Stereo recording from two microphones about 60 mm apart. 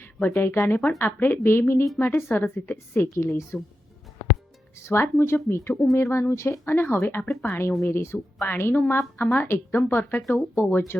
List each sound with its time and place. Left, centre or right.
0.0 s speech: left
2.7 s speech: left
4.7 s speech: left